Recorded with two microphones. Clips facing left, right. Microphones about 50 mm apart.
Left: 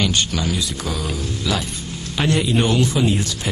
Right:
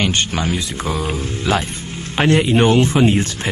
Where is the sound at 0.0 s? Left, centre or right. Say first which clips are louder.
Right 2 dB; right.